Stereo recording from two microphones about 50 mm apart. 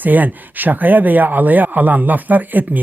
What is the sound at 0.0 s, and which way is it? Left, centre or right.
Speech, right.